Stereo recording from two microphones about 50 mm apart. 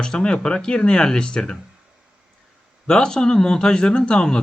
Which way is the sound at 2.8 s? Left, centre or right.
Centre.